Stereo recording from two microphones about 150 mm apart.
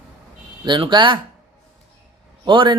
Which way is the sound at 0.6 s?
30° right (ahead or behind).